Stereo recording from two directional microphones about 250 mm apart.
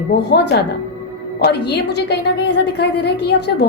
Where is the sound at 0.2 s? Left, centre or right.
Left.